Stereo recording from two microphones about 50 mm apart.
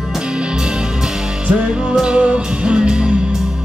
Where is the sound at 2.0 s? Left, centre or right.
Right.